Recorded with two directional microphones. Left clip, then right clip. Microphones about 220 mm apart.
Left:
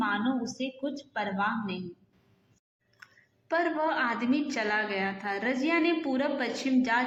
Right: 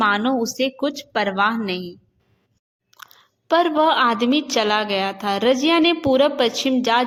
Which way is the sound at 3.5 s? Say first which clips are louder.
Right 11 dB; 50° right (ahead or behind).